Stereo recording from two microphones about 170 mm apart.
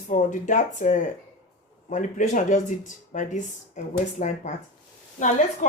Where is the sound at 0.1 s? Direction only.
50° left (ahead or behind).